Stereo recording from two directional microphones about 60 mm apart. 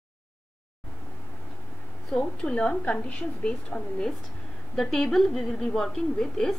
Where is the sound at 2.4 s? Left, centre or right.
Centre.